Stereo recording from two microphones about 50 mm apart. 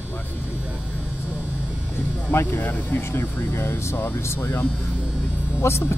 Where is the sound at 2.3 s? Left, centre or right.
Left.